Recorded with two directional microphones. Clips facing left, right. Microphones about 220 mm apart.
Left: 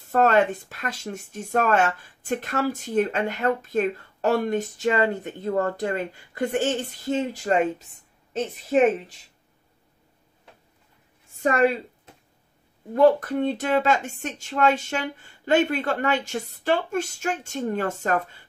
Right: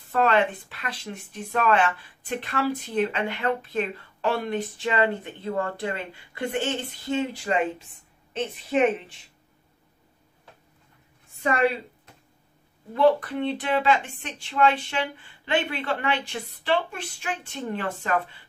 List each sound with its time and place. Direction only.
0.1 s a woman's voice: 45° left (ahead or behind)
11.4 s speech: 45° left (ahead or behind)
12.9 s speech: 45° left (ahead or behind)